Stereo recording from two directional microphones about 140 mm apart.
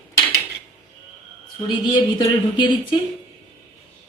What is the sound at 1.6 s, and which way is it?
A woman's voice, 35° left (ahead or behind).